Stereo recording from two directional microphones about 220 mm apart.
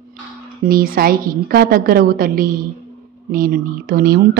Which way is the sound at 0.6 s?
40° right (ahead or behind).